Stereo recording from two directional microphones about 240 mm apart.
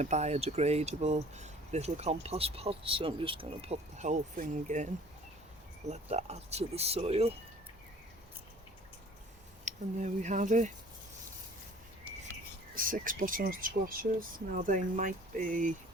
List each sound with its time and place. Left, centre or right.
0.0 s speech: right
5.9 s speech: right
9.6 s speech: right
12.7 s speech: right